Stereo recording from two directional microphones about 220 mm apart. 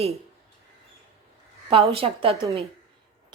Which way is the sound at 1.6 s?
25° right (ahead or behind).